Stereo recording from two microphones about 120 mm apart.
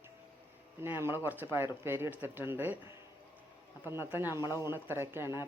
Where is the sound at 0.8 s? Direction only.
20° right (ahead or behind).